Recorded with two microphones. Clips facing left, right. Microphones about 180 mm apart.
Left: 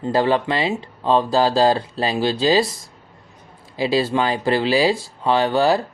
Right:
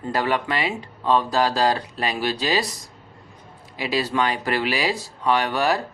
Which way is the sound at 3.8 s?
30° left (ahead or behind).